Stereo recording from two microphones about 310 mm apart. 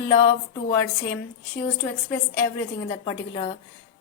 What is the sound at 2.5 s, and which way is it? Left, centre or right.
Speech, centre.